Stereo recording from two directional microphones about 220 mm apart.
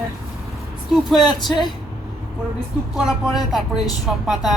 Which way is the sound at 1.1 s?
20° left (ahead or behind).